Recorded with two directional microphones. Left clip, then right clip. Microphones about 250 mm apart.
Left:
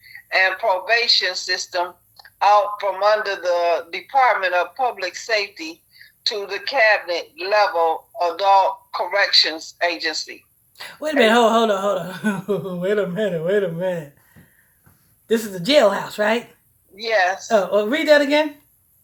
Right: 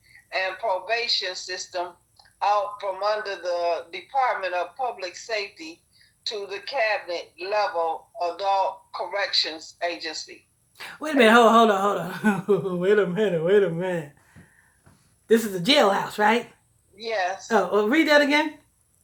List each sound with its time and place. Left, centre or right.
0.0 s speech: left
10.8 s speech: centre
15.3 s speech: centre
17.0 s speech: left
17.5 s speech: centre